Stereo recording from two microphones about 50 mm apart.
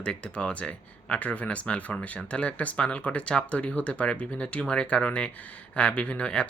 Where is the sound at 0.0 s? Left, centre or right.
Left.